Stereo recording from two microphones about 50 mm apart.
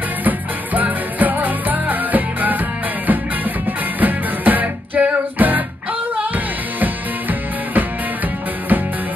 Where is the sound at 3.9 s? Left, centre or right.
Right.